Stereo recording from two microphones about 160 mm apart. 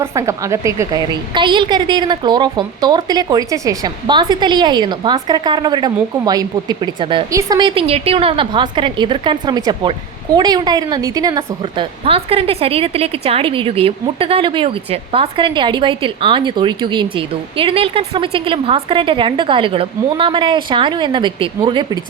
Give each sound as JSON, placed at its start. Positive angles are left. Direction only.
{"t": 0.0, "sound": "a woman's voice", "side_deg": -20}
{"t": 7.3, "sound": "a woman's voice", "side_deg": -20}
{"t": 12.0, "sound": "a woman's voice", "side_deg": -35}